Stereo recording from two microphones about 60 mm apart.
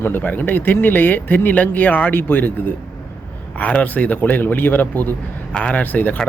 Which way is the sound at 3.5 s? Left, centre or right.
Left.